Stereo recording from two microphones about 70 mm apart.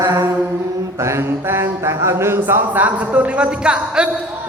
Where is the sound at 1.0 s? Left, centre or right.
Right.